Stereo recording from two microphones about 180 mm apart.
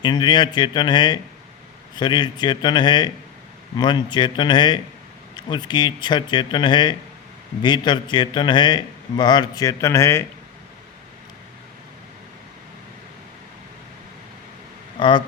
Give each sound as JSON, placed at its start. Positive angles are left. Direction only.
{"t": 0.0, "sound": "speech", "side_deg": 25}
{"t": 14.9, "sound": "speech", "side_deg": 25}